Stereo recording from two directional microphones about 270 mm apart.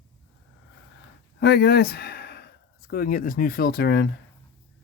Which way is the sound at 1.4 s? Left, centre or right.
Left.